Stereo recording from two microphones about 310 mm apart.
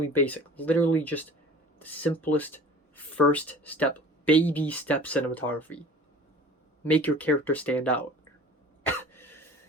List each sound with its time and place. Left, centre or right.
0.1 s speech: centre
9.0 s cough: centre